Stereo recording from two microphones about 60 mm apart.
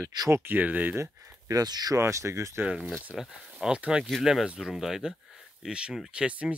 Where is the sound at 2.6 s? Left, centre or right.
Right.